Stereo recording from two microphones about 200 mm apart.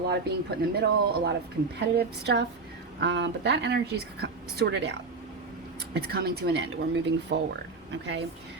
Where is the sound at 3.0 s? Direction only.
60° right (ahead or behind).